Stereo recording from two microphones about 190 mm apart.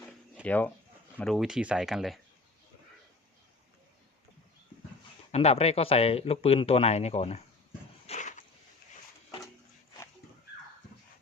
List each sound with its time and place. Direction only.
0.4 s speech: 10° left (ahead or behind)
5.3 s speech: 35° left (ahead or behind)
8.0 s a sound: 40° left (ahead or behind)